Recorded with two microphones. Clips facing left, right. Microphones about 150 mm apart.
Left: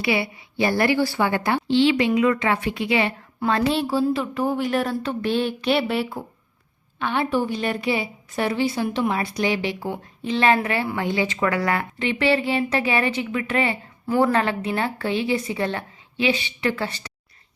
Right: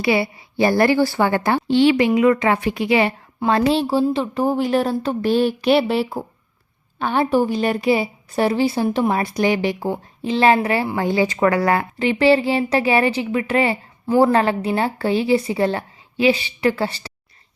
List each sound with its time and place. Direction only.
0.0 s speech: 40° right (ahead or behind)
2.0 s speech: 30° right (ahead or behind)